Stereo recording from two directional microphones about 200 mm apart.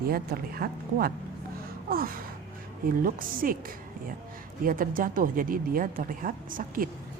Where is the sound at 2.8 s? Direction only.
45° right (ahead or behind).